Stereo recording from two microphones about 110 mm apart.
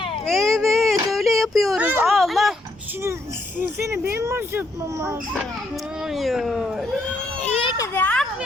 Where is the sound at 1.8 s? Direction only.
15° right (ahead or behind).